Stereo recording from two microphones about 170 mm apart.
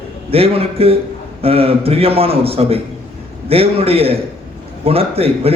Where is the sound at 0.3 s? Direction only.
35° right (ahead or behind).